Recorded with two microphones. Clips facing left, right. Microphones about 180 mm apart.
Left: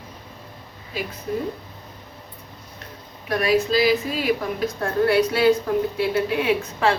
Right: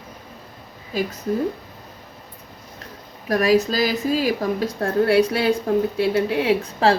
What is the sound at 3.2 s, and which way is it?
A woman's voice, 40° right (ahead or behind).